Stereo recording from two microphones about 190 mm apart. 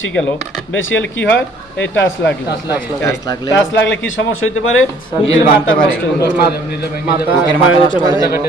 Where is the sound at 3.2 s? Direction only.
20° left (ahead or behind).